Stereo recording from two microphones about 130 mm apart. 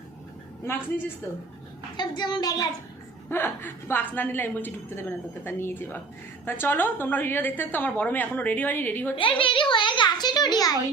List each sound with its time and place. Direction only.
0.6 s a woman's voice: 20° left (ahead or behind)
2.0 s a woman's voice: 35° left (ahead or behind)
3.2 s a woman's voice: 15° left (ahead or behind)
9.1 s a child's voice: 40° left (ahead or behind)